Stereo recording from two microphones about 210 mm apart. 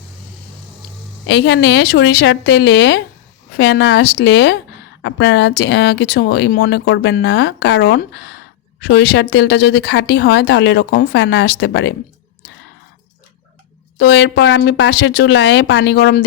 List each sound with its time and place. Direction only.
1.3 s speech: 55° left (ahead or behind)
14.0 s speech: 55° left (ahead or behind)